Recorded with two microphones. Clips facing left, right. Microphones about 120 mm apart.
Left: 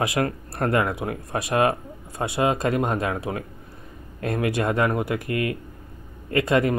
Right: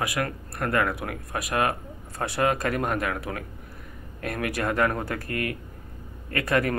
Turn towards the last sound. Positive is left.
turn(degrees=20)  # may be behind; listen again after turning